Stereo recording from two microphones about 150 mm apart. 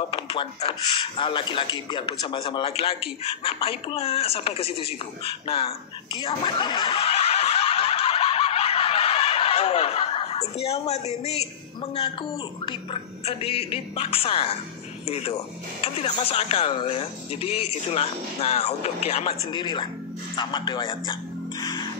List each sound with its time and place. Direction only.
0.1 s a man's voice: 35° left (ahead or behind)
6.1 s snicker: 30° left (ahead or behind); by 11.4 s 45° left (ahead or behind)
11.9 s a man's voice: 35° left (ahead or behind)
19.5 s a man's voice: 30° left (ahead or behind)
20.3 s music: 30° left (ahead or behind)